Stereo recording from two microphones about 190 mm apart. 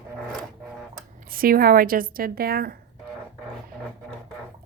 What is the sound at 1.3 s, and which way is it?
A woman's voice, 50° right (ahead or behind).